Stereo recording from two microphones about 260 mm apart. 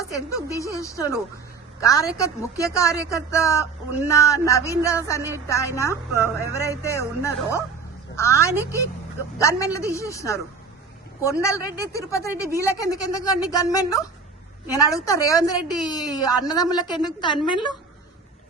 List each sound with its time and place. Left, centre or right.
0.0 s a woman's voice: centre